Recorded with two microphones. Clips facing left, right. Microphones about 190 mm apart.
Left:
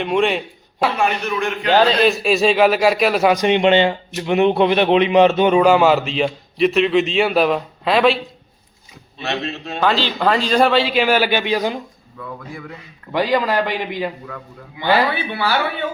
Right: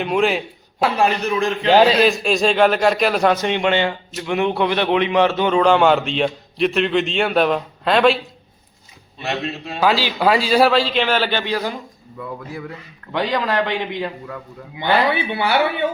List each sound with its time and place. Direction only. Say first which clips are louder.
0.0 s a man's voice: even; centre (ahead or behind)
0.9 s a man's voice: right 2 dB; 35° right (ahead or behind)
1.7 s a man's voice: right 1 dB; 10° right (ahead or behind)
2.0 s a man's voice: left 2 dB; 5° left (ahead or behind)
3.3 s a man's voice: left 5 dB; 15° left (ahead or behind); by 8.2 s centre (ahead or behind)
9.2 s a man's voice: even; 10° right (ahead or behind); by 11.8 s 20° left (ahead or behind)
13.1 s speech: left 3 dB; 5° left (ahead or behind)
15.1 s speech: right 2 dB; 20° right (ahead or behind)